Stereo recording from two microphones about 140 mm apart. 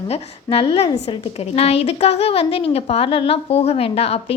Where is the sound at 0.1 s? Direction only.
40° left (ahead or behind).